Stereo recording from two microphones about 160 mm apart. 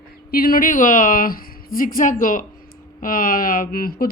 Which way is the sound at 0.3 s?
65° left (ahead or behind).